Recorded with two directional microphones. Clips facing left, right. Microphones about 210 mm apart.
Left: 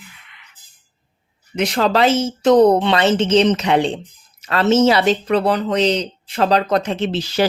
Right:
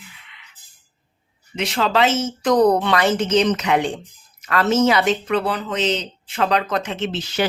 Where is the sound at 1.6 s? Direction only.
45° left (ahead or behind).